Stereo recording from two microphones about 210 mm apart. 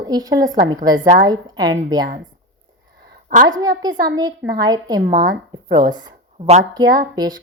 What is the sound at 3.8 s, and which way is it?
A woman's voice, 20° right (ahead or behind).